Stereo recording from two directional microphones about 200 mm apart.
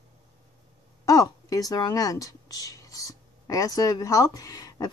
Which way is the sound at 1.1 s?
15° left (ahead or behind).